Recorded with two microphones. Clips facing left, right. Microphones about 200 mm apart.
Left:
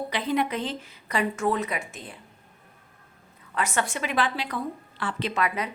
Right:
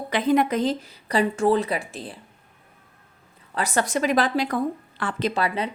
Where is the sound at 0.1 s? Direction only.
45° right (ahead or behind).